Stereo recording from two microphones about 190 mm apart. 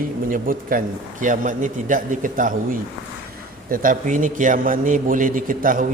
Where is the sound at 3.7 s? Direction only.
45° right (ahead or behind).